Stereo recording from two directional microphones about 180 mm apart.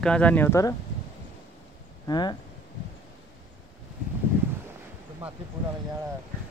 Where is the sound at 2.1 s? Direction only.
25° left (ahead or behind).